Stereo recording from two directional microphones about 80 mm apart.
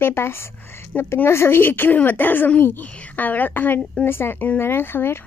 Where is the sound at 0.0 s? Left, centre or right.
Left.